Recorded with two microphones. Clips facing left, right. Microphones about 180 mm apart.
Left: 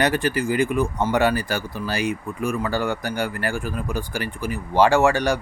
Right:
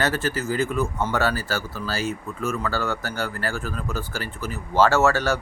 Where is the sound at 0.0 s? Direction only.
15° left (ahead or behind).